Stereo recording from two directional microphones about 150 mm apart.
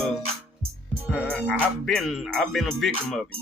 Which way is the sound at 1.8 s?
Centre (ahead or behind).